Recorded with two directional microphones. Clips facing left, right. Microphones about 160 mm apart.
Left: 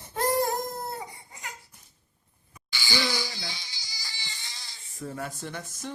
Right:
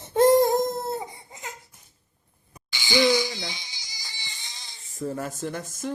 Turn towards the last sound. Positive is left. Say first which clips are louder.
# right 5 dB
turn(degrees=-45)  # may be behind; listen again after turning